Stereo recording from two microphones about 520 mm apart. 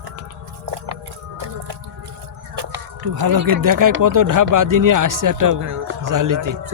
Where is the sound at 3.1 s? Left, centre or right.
Right.